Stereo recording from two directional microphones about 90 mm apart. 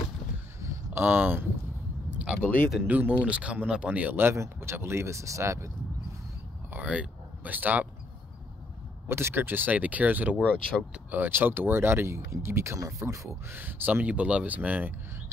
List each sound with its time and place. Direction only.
0.6 s a sound: 30° right (ahead or behind)
2.1 s a sound: 10° right (ahead or behind)
2.4 s speech: 20° left (ahead or behind)
2.9 s speech: 15° right (ahead or behind); by 5.7 s 35° right (ahead or behind)
6.7 s speech: 15° right (ahead or behind)
9.1 s speech: 25° right (ahead or behind)